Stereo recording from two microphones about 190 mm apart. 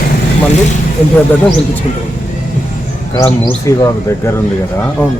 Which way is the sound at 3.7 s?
15° left (ahead or behind).